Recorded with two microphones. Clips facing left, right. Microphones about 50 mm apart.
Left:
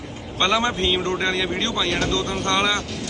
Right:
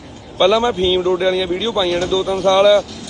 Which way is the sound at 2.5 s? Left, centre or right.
Centre.